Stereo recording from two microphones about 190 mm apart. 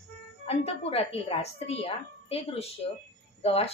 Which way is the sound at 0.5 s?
30° left (ahead or behind).